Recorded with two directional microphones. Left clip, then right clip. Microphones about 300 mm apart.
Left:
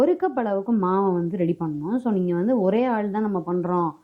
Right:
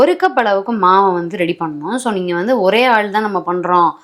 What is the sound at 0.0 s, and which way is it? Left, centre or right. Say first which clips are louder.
A woman's voice: right 9 dB; centre.